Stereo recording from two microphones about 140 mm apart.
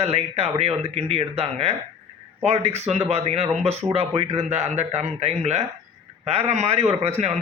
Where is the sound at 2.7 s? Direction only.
50° right (ahead or behind).